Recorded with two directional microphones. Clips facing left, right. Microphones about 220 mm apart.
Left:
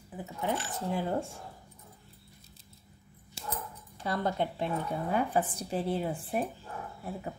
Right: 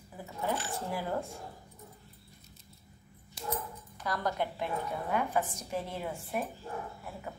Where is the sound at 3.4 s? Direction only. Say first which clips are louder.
Right 3 dB; 25° left (ahead or behind).